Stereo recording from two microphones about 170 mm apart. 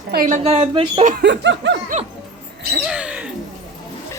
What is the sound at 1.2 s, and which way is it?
Laughter, 90° right.